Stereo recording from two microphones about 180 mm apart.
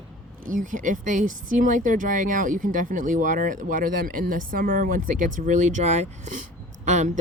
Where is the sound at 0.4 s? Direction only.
50° right (ahead or behind).